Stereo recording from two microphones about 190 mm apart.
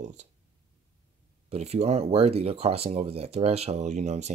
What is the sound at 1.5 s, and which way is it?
Speech, 35° right (ahead or behind).